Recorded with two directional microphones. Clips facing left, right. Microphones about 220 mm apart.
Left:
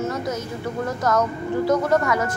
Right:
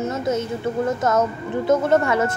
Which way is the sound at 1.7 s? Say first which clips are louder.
Right 3 dB; 25° right (ahead or behind).